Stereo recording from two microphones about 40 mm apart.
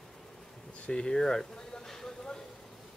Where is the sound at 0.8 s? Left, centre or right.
Left.